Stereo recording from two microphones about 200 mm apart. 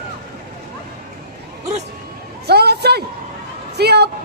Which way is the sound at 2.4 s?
55° right (ahead or behind).